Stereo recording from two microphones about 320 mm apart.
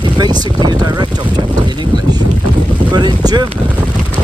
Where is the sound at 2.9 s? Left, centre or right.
Centre.